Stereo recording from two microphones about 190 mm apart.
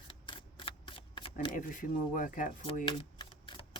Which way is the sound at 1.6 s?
45° left (ahead or behind).